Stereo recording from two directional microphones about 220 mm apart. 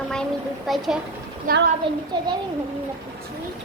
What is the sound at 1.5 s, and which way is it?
Speech, 40° right (ahead or behind).